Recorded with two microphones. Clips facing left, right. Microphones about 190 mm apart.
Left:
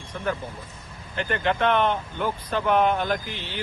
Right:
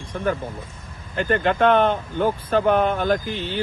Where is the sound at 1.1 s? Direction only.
45° right (ahead or behind).